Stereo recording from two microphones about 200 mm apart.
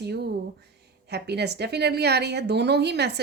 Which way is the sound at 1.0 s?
55° right (ahead or behind).